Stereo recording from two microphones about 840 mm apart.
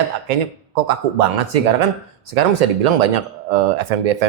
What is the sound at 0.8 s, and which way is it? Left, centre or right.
Speech, right.